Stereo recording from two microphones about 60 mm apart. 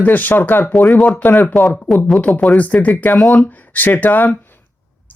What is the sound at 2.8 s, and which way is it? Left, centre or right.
Speech, left.